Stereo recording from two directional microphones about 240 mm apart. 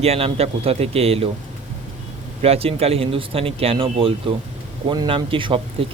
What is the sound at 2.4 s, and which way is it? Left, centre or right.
Speech, right.